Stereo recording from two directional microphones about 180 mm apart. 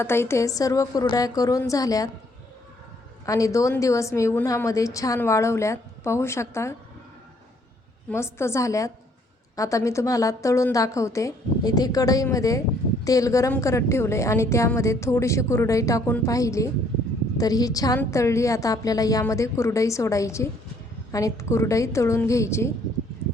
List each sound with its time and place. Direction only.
0.0 s a woman's voice: 15° left (ahead or behind)
3.2 s a woman's voice: 20° left (ahead or behind)
8.1 s a woman's voice: 15° left (ahead or behind)